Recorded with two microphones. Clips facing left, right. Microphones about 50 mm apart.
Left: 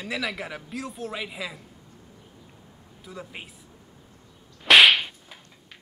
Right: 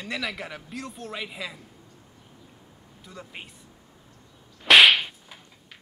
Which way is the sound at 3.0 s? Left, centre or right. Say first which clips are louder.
Left 2 dB; centre.